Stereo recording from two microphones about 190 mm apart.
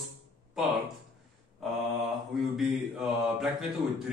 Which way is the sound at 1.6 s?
Centre (ahead or behind).